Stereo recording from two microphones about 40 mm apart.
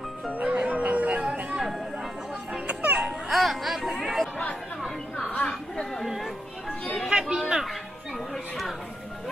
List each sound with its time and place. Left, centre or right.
0.4 s music: right
2.6 s children playing: right
3.3 s music: centre
3.9 s chatter: centre
4.8 s a sound: centre
6.0 s chatter: centre
7.1 s a sound: right